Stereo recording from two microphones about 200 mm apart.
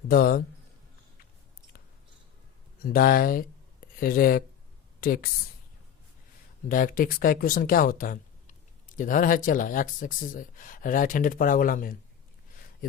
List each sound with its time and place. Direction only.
0.1 s speech: 45° left (ahead or behind)
2.8 s speech: 45° left (ahead or behind)
6.7 s speech: 45° left (ahead or behind)